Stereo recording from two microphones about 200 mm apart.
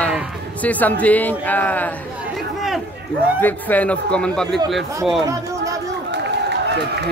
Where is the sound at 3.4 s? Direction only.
10° left (ahead or behind).